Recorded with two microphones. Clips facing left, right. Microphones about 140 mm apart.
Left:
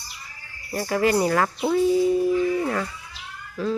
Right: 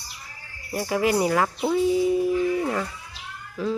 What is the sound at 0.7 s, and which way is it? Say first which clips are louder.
Speech: left 1 dB; 10° right (ahead or behind).